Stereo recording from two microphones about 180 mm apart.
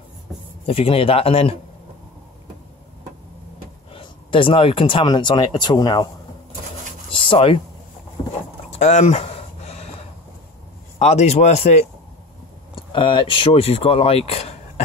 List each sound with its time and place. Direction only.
0.7 s speech: 30° left (ahead or behind)
3.9 s speech: 30° left (ahead or behind)
7.2 s speech: 30° left (ahead or behind)
8.6 s a sound: 40° left (ahead or behind)
11.0 s speech: 40° left (ahead or behind)